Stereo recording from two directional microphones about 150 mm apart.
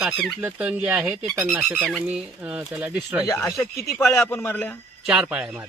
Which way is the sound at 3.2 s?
20° left (ahead or behind).